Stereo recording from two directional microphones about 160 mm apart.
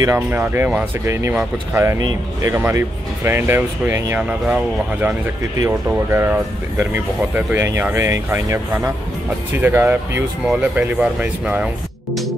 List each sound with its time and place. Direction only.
0.0 s speech: 15° right (ahead or behind)